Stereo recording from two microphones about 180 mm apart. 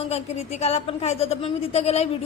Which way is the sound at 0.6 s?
35° left (ahead or behind).